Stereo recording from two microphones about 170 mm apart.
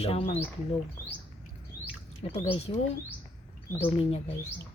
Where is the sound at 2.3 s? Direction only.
35° left (ahead or behind).